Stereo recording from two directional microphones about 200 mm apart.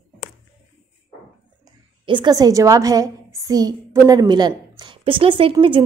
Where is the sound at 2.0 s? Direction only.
20° right (ahead or behind).